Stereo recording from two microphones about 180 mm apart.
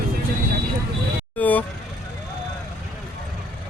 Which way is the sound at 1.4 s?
10° left (ahead or behind).